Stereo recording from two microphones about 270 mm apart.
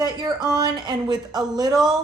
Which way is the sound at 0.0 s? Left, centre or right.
Centre.